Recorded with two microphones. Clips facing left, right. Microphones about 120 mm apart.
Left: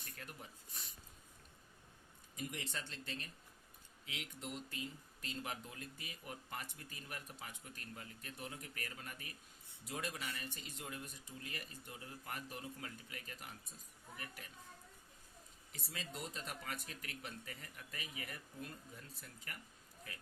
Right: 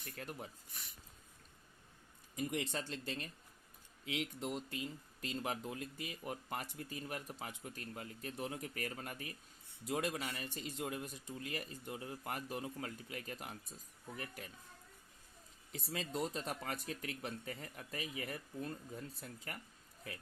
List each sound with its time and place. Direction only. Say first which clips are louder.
0.2 s speech: right 7 dB; 40° right (ahead or behind)
2.3 s speech: right 7 dB; 45° right (ahead or behind)
15.9 s speech: right 8 dB; 40° right (ahead or behind)